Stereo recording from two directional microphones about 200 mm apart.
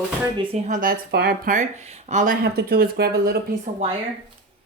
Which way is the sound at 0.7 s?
45° right (ahead or behind).